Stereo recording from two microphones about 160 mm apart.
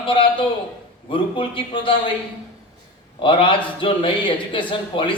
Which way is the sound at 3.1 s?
30° left (ahead or behind).